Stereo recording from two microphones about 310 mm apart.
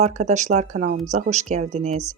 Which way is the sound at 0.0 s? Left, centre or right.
Right.